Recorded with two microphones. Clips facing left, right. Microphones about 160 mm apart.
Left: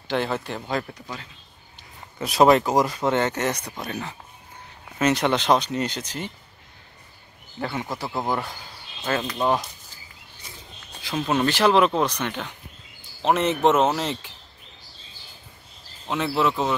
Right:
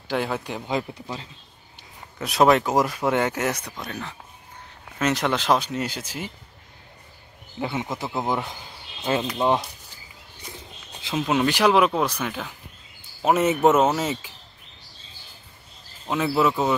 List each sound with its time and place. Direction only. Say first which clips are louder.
0.1 s speech: left 1 dB; 10° right (ahead or behind); by 1.3 s 25° right (ahead or behind)
2.1 s speech: left 1 dB; centre (ahead or behind)
7.6 s speech: right 1 dB; 15° right (ahead or behind)
11.1 s speech: even; 5° right (ahead or behind)
16.1 s speech: right 2 dB; centre (ahead or behind)